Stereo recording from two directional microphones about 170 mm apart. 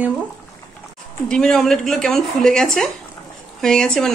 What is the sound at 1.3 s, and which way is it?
A woman's voice, centre (ahead or behind).